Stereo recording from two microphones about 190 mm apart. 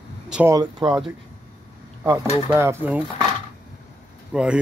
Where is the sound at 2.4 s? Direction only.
15° right (ahead or behind).